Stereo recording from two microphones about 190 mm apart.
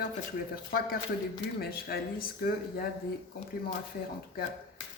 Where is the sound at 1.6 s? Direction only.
55° left (ahead or behind).